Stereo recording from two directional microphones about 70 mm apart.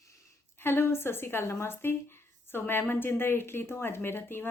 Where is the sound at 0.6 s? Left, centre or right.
Left.